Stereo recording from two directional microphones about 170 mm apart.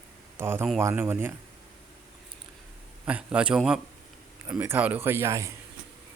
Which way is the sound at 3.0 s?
5° right (ahead or behind).